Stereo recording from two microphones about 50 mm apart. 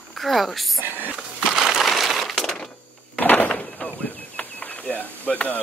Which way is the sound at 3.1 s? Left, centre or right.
Left.